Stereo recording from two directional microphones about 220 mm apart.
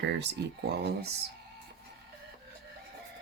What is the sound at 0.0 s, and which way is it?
Speech, 50° right (ahead or behind).